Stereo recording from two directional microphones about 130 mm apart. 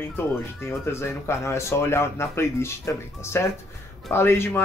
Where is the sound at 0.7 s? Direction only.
20° left (ahead or behind).